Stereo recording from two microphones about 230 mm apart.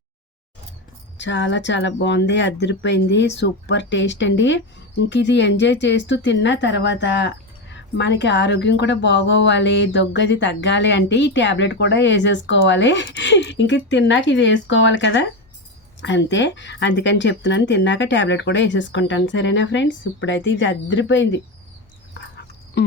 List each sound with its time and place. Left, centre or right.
1.2 s speech: left